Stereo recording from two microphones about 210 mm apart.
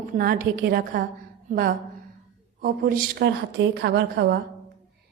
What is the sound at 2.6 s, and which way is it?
A woman's voice, 45° right (ahead or behind).